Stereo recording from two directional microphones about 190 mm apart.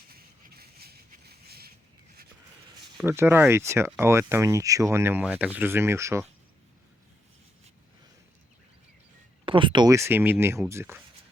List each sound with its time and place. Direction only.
0.1 s a sound: 50° right (ahead or behind)
3.1 s speech: 10° right (ahead or behind)
9.5 s speech: 25° right (ahead or behind)